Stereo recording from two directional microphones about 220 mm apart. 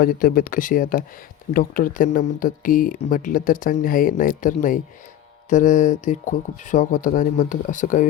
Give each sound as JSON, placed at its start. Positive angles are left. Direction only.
{"t": 0.0, "sound": "speech", "side_deg": 40}